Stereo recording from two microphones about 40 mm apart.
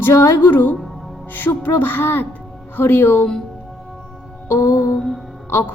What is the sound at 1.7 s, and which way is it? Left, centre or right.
A woman's voice, left.